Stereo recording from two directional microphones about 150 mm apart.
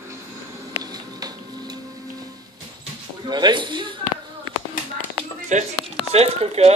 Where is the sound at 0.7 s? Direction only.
25° right (ahead or behind).